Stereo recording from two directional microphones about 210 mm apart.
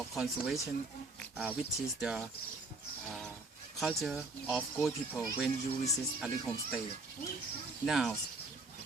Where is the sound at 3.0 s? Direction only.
Centre (ahead or behind).